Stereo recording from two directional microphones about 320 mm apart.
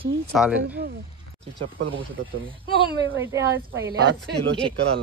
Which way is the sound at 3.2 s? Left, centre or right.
Centre.